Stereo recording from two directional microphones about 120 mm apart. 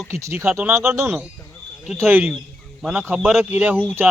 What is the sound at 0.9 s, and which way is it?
Speech, 15° right (ahead or behind).